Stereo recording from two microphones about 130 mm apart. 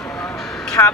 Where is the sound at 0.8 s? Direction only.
20° left (ahead or behind).